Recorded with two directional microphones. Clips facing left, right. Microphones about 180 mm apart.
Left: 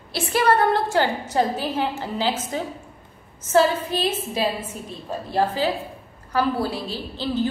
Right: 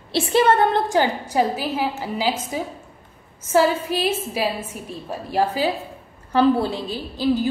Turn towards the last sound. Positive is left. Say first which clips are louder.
# right 4 dB
turn(degrees=-10)  # may be behind; listen again after turning